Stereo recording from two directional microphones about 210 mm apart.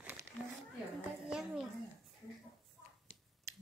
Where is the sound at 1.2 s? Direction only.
5° right (ahead or behind).